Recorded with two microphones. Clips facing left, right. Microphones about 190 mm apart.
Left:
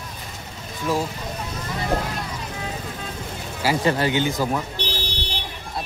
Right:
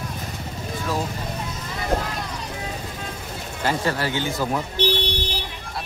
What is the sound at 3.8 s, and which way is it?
Speech, 20° left (ahead or behind).